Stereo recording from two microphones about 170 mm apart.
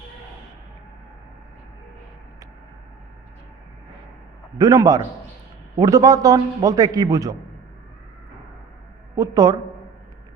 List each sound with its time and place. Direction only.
4.5 s a man's voice: 20° right (ahead or behind)
9.1 s a man's voice: 20° right (ahead or behind)